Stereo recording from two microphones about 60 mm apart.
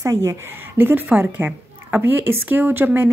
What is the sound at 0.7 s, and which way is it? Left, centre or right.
Speech, right.